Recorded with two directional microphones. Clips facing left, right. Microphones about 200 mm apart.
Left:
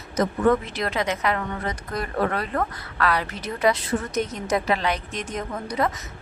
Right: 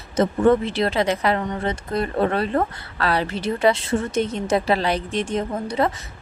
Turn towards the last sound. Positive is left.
turn(degrees=-25)  # may be behind; listen again after turning